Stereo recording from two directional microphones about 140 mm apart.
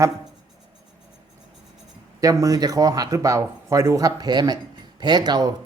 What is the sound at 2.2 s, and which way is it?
Speech, 25° right (ahead or behind).